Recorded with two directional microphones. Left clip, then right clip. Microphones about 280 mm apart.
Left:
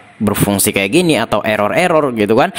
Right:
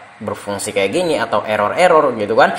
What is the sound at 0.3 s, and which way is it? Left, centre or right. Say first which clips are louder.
Speech: left 6 dB; left.